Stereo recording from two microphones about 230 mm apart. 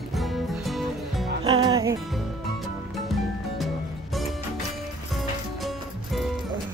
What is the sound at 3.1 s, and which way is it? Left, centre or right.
Music, centre.